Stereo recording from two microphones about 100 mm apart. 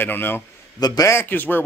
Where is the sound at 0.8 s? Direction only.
40° left (ahead or behind).